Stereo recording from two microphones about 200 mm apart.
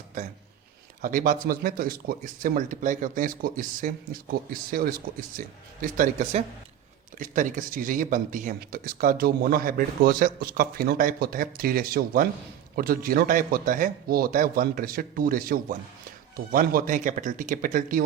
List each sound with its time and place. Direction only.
1.0 s speech: 40° right (ahead or behind)